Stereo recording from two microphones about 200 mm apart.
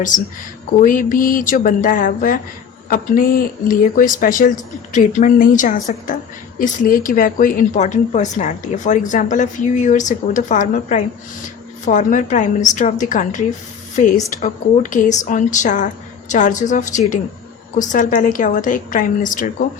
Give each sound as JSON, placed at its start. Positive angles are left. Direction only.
{"t": 0.8, "sound": "a woman's voice", "side_deg": 40}